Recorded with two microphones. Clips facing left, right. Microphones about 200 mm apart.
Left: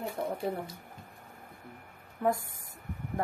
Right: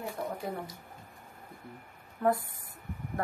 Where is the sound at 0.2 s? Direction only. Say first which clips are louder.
Left 3 dB; 20° left (ahead or behind).